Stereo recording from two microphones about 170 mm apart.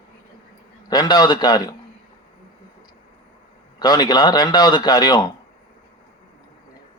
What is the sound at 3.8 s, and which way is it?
Speech, 25° left (ahead or behind).